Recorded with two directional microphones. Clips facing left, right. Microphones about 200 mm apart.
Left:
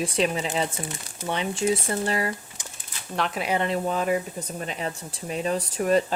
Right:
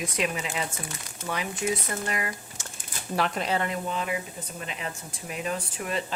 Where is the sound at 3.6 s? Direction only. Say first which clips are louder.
Left 4 dB; 30° left (ahead or behind).